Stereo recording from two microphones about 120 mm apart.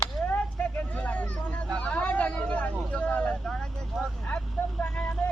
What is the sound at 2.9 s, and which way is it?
Vehicle, 15° left (ahead or behind).